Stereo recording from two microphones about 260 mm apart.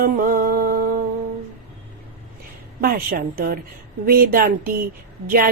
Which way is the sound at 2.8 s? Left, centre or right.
Right.